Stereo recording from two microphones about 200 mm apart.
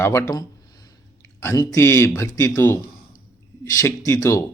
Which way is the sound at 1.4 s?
15° left (ahead or behind).